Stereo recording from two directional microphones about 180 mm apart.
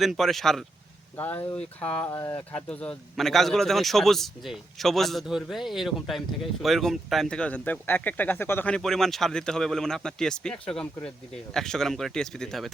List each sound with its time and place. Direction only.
0.0 s speech: centre (ahead or behind)